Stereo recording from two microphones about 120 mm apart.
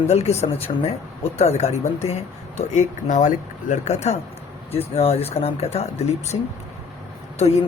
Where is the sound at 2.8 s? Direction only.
90° left; by 4.1 s 70° left (ahead or behind).